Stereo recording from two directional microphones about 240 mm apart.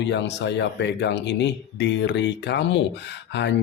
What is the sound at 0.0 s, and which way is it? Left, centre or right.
Speech, left.